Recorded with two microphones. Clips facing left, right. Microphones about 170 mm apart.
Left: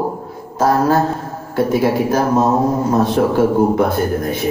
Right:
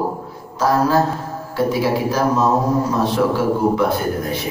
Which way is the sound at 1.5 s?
50° left (ahead or behind).